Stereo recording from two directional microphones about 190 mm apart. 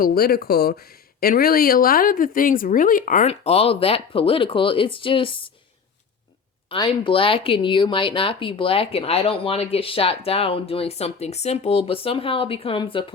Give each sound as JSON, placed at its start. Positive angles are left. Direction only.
{"t": 0.0, "sound": "speech", "side_deg": 55}
{"t": 6.7, "sound": "speech", "side_deg": 25}